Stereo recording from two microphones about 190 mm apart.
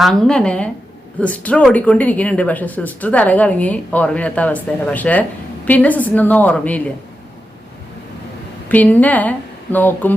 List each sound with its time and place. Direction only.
0.0 s a woman's voice: 5° left (ahead or behind)
8.7 s speech: 10° left (ahead or behind)